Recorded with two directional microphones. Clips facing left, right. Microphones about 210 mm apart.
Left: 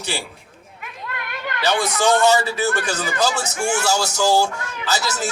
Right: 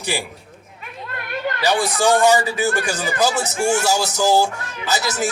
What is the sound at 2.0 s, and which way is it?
A man's voice, 15° right (ahead or behind).